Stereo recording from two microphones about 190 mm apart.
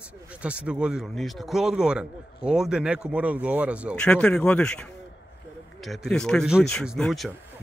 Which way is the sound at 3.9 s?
5° left (ahead or behind).